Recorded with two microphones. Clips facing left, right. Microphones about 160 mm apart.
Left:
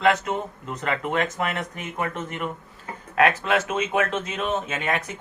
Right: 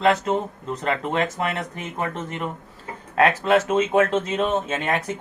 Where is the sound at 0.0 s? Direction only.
30° right (ahead or behind).